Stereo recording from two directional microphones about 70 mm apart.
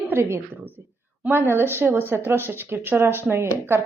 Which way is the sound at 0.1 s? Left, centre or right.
Right.